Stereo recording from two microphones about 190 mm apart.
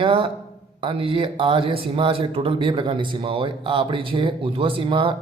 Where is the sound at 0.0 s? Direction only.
25° right (ahead or behind).